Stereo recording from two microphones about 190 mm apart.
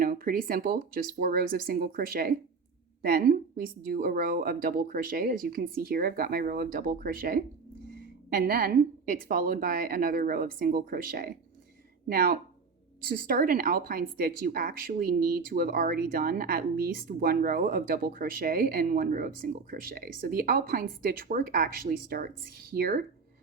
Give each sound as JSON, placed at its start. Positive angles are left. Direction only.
{"t": 0.0, "sound": "a woman's voice", "side_deg": -50}